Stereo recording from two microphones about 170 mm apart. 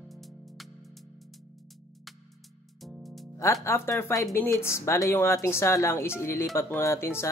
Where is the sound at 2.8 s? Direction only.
Centre (ahead or behind).